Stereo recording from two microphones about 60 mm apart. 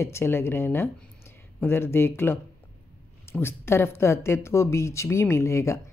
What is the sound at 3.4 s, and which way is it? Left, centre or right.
Speech, left.